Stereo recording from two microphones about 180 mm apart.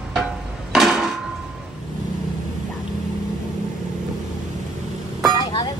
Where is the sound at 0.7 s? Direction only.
Centre (ahead or behind).